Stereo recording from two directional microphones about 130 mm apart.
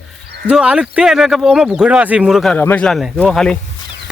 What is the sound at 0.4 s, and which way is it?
Speech, 10° right (ahead or behind).